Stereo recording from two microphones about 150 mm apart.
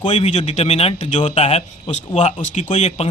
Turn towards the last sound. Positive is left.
turn(degrees=45)  # may be behind; listen again after turning